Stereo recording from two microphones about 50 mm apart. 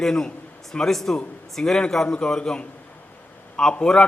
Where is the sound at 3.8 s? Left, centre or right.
Centre.